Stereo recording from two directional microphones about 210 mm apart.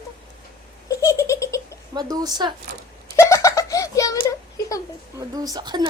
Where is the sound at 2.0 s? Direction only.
15° right (ahead or behind).